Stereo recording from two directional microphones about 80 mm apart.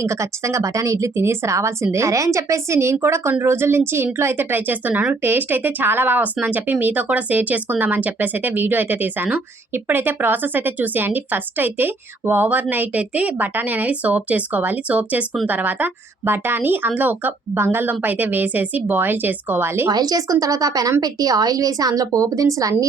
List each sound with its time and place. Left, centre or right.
0.0 s a woman's voice: right
19.9 s a woman's voice: right